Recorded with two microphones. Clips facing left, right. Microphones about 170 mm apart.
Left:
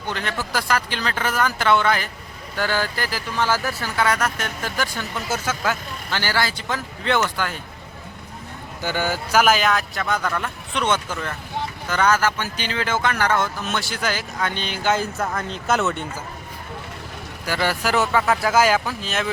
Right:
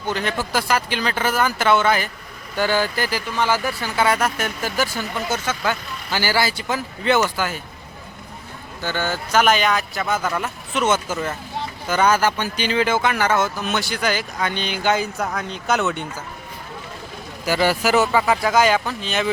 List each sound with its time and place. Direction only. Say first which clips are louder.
0.5 s speech: right 1 dB; 5° right (ahead or behind)
3.9 s speech: right 2 dB; 20° right (ahead or behind)
4.2 s speech: right 3 dB; 10° right (ahead or behind)
5.3 s speech: even; 5° left (ahead or behind)
6.1 s speech: right 3 dB; 10° right (ahead or behind)
8.8 s speech: even; 10° left (ahead or behind)
17.4 s speech: right 4 dB; 10° right (ahead or behind)